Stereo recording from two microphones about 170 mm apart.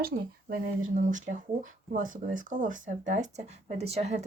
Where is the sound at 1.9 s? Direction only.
50° right (ahead or behind).